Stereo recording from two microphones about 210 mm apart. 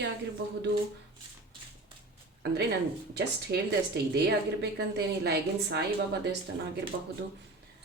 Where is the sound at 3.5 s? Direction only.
50° right (ahead or behind).